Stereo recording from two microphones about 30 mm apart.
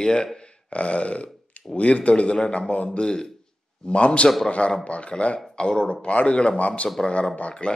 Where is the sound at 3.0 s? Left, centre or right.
Left.